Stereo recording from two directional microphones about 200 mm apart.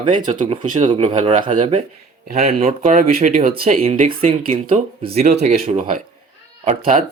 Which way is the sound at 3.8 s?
30° right (ahead or behind).